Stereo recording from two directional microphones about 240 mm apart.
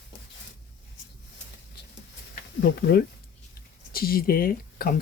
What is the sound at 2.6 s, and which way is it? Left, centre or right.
Speech, left.